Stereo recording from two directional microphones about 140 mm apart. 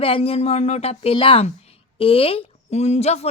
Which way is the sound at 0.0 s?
45° left (ahead or behind).